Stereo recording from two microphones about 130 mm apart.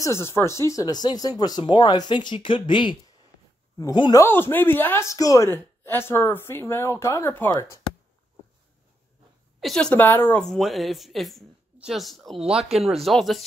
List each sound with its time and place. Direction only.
0.0 s speech: 20° left (ahead or behind); by 4.2 s 35° left (ahead or behind)
4.2 s a woman's voice: 15° left (ahead or behind)
9.6 s a woman's voice: 5° left (ahead or behind)
10.4 s speech: centre (ahead or behind)